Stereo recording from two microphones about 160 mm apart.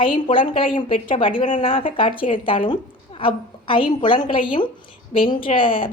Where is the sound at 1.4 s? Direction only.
50° left (ahead or behind).